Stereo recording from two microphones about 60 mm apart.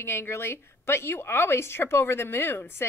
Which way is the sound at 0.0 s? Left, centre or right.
Left.